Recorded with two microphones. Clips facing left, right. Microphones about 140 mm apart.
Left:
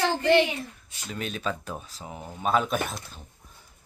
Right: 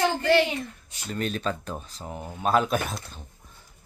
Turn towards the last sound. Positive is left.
turn(degrees=0)  # may be behind; listen again after turning